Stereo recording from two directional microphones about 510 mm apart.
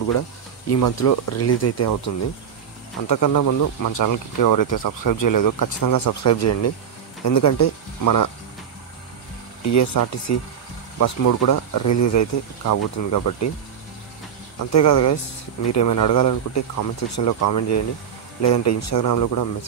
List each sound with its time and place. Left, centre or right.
0.7 s speech: left
3.1 s speech: left
9.7 s speech: left
14.7 s speech: left